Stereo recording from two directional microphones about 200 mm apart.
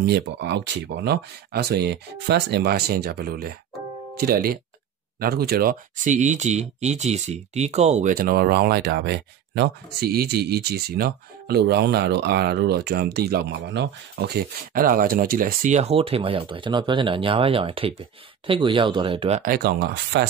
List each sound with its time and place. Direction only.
0.0 s speech: 55° right (ahead or behind); by 19.4 s 30° right (ahead or behind)
19.4 s speech: 50° right (ahead or behind)